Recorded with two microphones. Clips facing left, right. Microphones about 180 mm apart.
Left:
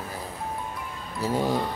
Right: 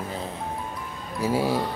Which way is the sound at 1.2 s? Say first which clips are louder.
Right 1 dB; 10° right (ahead or behind).